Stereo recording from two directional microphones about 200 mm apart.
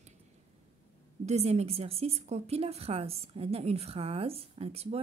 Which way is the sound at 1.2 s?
30° right (ahead or behind).